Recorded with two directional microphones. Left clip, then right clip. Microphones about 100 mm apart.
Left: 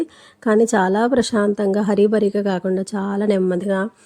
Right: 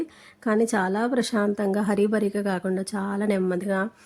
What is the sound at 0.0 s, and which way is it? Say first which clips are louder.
Speech: left 7 dB; 45° left (ahead or behind).